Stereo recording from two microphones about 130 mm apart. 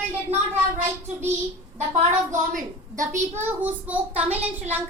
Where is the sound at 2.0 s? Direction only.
70° right (ahead or behind).